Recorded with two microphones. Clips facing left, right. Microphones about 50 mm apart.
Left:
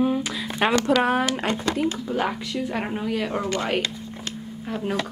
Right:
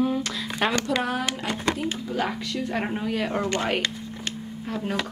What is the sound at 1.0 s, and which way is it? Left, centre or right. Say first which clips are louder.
Speech: left 5 dB; left.